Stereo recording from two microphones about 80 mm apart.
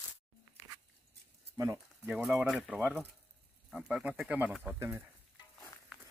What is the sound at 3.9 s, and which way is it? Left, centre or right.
Speech, centre.